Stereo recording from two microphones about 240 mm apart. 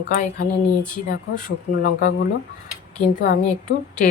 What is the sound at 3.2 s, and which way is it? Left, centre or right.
Speech, left.